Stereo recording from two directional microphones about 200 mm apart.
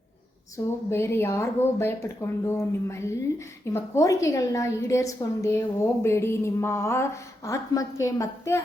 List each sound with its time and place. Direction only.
0.5 s a woman's voice: 15° left (ahead or behind)